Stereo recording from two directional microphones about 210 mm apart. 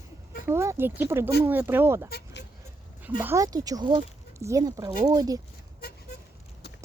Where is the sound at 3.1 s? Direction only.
10° right (ahead or behind).